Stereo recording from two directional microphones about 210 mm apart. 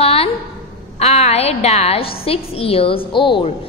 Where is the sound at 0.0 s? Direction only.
30° left (ahead or behind).